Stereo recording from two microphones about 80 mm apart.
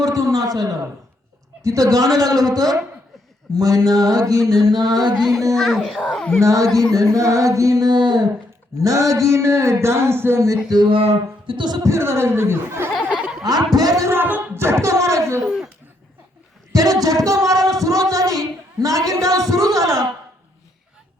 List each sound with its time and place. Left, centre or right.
0.0 s a sound: right
1.6 s speech: right
5.5 s speech: centre
6.4 s speech: right
8.8 s speech: right
10.7 s a sound: right
11.8 s speech: right
13.1 s a sound: centre
13.4 s speech: right
14.1 s speech: right
15.4 s speech: centre
16.7 s speech: right